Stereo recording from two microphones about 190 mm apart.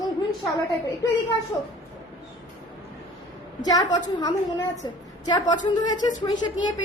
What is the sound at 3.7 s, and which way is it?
A woman's voice, 20° left (ahead or behind).